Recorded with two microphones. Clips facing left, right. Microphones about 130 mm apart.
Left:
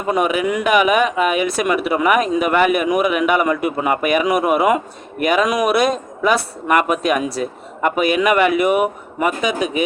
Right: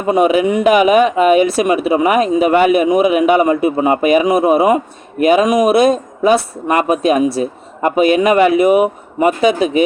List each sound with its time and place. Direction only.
0.1 s a man's voice: 30° right (ahead or behind)